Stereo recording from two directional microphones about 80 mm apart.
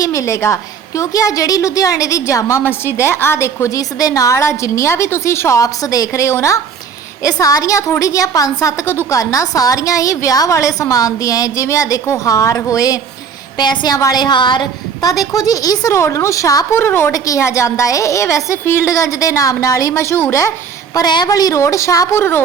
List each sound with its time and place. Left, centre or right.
0.0 s a woman's voice: left
13.6 s a woman's voice: left
15.2 s a woman's voice: left
16.0 s a woman's voice: left
16.7 s a woman's voice: left
17.1 s a woman's voice: left
20.9 s a woman's voice: left
21.2 s a woman's voice: left
22.1 s a woman's voice: left